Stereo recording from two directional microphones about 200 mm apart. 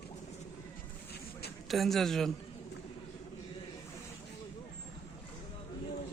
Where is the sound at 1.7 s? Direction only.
Centre (ahead or behind).